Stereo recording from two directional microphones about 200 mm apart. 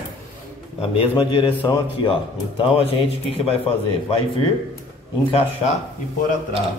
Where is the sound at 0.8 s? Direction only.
30° left (ahead or behind).